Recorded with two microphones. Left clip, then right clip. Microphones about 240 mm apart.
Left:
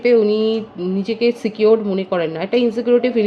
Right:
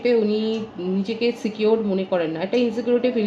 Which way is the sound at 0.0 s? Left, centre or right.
Left.